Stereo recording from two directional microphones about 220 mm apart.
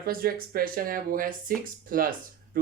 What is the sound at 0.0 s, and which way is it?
Speech, 40° right (ahead or behind).